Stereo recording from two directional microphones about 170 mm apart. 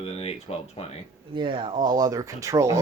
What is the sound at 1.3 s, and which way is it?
Speech, 30° right (ahead or behind).